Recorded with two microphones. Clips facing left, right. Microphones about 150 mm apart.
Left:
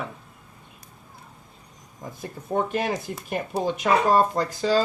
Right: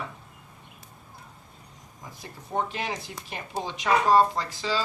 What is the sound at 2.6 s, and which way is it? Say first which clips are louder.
Speech: left 5 dB; 50° left (ahead or behind).